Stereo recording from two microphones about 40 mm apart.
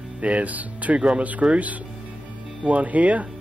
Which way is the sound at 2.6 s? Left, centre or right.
Right.